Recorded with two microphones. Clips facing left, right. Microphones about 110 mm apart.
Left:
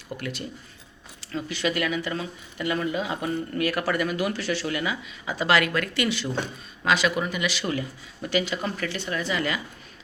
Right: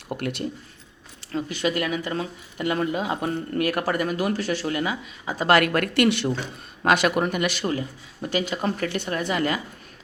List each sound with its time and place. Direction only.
0.1 s speech: 60° right (ahead or behind)
1.3 s speech: 45° right (ahead or behind)
7.6 s speech: 35° right (ahead or behind)